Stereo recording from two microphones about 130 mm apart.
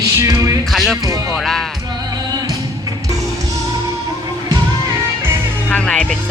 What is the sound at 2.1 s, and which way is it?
Music, 30° right (ahead or behind).